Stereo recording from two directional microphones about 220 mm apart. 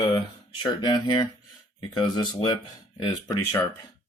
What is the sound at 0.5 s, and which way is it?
Speech, 20° left (ahead or behind).